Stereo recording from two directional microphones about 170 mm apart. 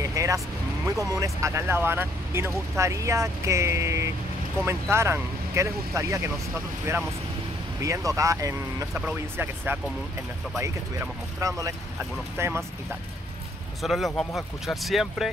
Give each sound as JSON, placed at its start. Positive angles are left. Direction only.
{"t": 0.0, "sound": "music", "side_deg": -20}
{"t": 0.8, "sound": "speech", "side_deg": -20}
{"t": 8.9, "sound": "speech", "side_deg": -10}
{"t": 13.8, "sound": "speech", "side_deg": 0}